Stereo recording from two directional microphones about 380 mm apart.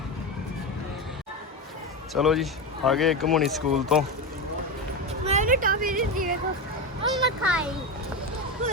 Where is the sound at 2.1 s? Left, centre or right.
Centre.